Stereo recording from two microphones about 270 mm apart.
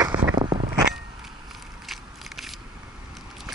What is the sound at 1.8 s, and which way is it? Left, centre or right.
Biting, centre.